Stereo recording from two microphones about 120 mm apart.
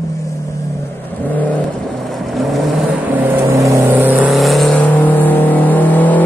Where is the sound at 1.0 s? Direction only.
15° left (ahead or behind).